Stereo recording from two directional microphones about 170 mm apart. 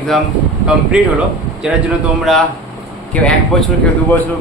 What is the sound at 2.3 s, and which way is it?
Speech, centre (ahead or behind).